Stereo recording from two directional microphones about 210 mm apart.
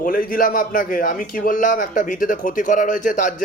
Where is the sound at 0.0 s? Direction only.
40° left (ahead or behind).